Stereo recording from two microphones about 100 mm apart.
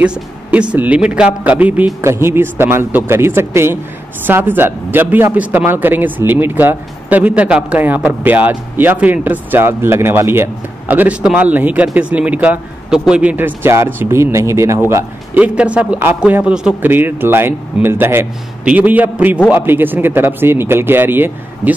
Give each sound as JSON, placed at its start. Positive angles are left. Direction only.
{"t": 0.0, "sound": "a man's voice", "side_deg": -10}
{"t": 15.3, "sound": "a man's voice", "side_deg": -15}